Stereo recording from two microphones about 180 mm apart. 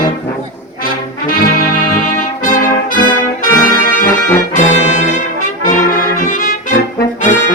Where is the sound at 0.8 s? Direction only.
50° left (ahead or behind).